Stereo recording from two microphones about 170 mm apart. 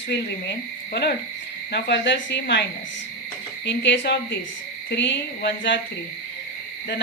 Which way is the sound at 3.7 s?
90° left.